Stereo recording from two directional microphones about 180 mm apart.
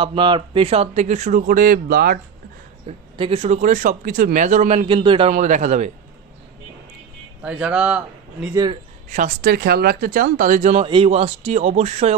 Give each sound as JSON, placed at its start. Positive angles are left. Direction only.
{"t": 0.0, "sound": "speech", "side_deg": -25}
{"t": 3.2, "sound": "speech", "side_deg": -35}
{"t": 5.3, "sound": "speech", "side_deg": -45}
{"t": 7.4, "sound": "a man's voice", "side_deg": -5}
{"t": 9.1, "sound": "speech", "side_deg": -50}